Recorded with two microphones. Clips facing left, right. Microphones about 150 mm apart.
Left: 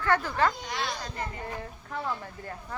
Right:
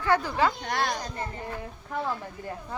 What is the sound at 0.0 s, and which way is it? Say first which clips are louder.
Speech: right 1 dB; 10° right (ahead or behind).